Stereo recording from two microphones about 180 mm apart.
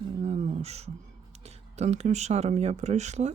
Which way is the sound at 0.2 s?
35° right (ahead or behind).